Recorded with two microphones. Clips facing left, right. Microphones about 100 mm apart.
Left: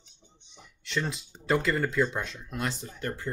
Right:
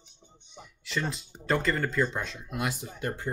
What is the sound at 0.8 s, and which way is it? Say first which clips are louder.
Speech: left 1 dB; centre (ahead or behind).